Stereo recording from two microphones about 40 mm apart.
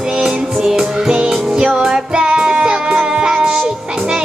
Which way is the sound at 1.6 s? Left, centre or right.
Centre.